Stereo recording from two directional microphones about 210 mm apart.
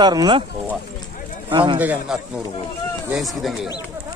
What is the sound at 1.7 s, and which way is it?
Speech, 5° right (ahead or behind).